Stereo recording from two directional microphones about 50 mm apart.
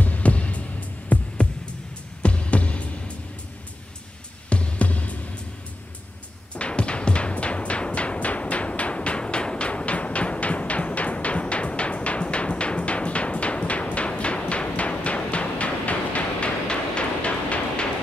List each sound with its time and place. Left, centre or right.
0.0 s music: left
1.0 s heart sounds: left
2.2 s music: left
4.5 s music: left
6.5 s music: left